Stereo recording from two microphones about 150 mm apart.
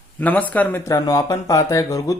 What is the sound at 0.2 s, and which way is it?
Speech, 10° left (ahead or behind).